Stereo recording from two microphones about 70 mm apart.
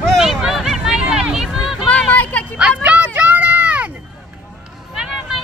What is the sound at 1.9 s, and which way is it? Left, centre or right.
Music, left.